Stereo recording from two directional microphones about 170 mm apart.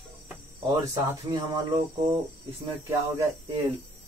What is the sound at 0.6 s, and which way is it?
Cricket, 25° right (ahead or behind).